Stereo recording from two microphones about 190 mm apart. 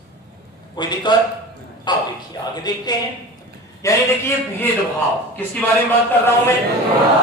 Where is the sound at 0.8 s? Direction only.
25° left (ahead or behind).